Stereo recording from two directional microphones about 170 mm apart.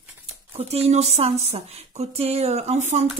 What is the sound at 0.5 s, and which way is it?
Speech, 35° right (ahead or behind).